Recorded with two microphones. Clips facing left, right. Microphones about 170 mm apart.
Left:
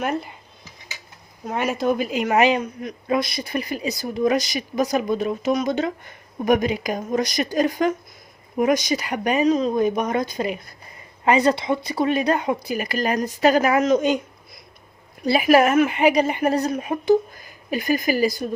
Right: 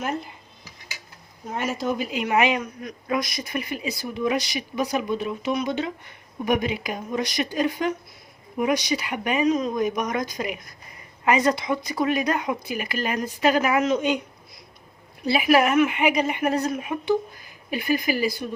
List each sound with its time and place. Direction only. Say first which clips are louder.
1.5 s speech: left 4 dB; 65° left (ahead or behind); by 14.2 s 40° left (ahead or behind)
15.2 s speech: left 3 dB; 40° left (ahead or behind)